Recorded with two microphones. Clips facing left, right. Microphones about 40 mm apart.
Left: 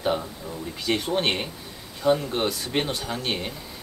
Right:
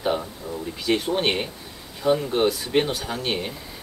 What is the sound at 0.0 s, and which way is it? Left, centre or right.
Speech, centre.